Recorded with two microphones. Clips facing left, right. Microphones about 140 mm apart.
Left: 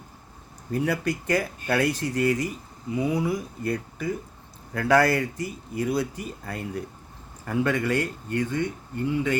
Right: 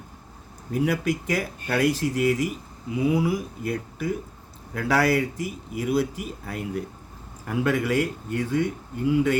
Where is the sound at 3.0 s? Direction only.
5° right (ahead or behind).